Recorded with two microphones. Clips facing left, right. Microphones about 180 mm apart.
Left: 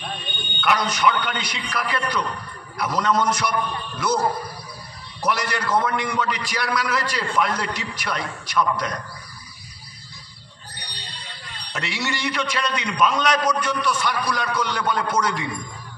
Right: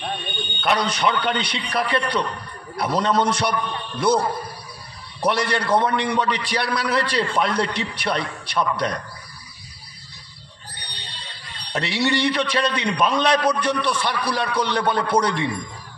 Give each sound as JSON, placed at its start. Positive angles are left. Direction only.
{"t": 0.6, "sound": "a man's voice", "side_deg": -30}
{"t": 11.7, "sound": "a man's voice", "side_deg": -30}